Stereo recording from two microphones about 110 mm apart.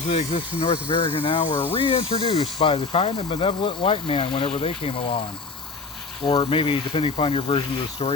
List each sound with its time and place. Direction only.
0.1 s speech: 65° left (ahead or behind)
6.4 s speech: 55° left (ahead or behind)